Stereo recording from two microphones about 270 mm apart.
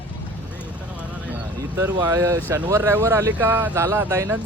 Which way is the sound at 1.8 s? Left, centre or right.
Centre.